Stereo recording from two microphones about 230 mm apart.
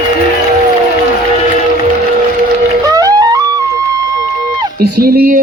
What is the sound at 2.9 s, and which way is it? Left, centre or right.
Music, centre.